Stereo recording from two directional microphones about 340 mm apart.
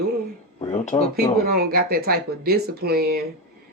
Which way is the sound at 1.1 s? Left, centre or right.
Right.